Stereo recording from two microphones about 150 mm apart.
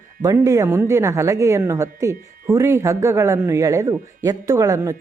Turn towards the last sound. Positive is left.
turn(degrees=-20)  # may be behind; listen again after turning